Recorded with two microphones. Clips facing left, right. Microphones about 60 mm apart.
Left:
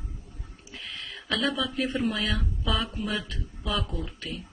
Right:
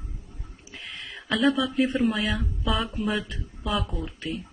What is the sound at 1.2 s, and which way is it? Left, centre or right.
Speech, centre.